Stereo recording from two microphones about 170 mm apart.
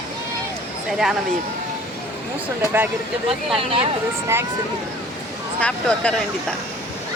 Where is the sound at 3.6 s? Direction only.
35° right (ahead or behind).